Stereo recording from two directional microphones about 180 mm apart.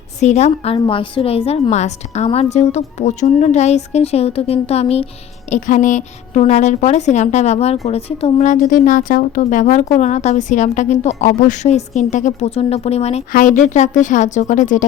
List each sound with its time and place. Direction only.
0.2 s speech: 40° left (ahead or behind)
13.3 s a woman's voice: 45° left (ahead or behind)